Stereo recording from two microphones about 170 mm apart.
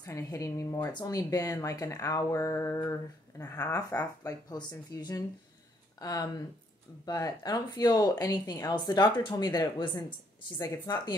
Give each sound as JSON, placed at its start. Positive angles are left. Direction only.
{"t": 0.0, "sound": "speech", "side_deg": 20}